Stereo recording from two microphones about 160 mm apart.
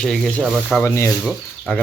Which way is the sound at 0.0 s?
5° left (ahead or behind).